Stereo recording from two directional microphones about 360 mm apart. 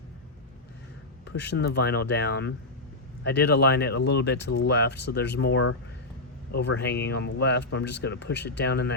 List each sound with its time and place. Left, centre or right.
1.3 s speech: left